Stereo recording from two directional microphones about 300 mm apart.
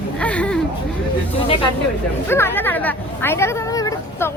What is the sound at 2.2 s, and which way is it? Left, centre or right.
Speech, centre.